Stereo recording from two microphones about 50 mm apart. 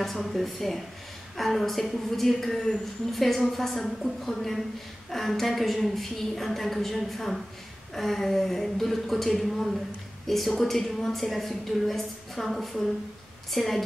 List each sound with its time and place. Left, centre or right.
0.0 s a woman's voice: centre